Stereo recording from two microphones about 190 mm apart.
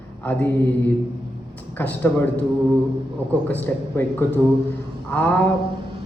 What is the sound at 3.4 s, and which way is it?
Speech, 10° left (ahead or behind).